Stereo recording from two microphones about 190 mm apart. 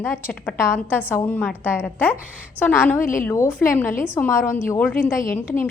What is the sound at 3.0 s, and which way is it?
Speech, 45° left (ahead or behind).